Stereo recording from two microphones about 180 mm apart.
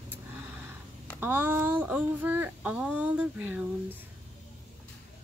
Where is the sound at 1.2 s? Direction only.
10° right (ahead or behind).